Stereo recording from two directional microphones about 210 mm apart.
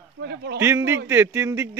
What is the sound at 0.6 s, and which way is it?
Speech, 10° right (ahead or behind).